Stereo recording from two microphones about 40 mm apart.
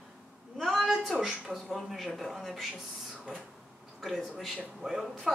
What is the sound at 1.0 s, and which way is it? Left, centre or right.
Speech, centre.